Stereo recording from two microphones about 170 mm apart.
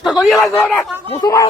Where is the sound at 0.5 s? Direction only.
10° left (ahead or behind).